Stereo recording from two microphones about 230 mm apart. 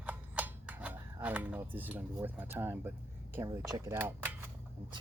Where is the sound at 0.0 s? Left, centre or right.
Centre.